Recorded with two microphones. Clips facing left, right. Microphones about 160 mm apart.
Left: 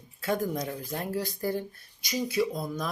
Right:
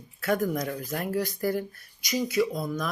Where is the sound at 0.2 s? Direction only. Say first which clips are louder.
Right 3 dB; 25° left (ahead or behind).